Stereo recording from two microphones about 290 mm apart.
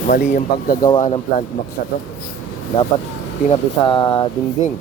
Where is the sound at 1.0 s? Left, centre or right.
Left.